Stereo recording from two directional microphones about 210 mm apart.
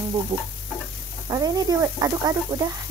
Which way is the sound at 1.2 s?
20° right (ahead or behind).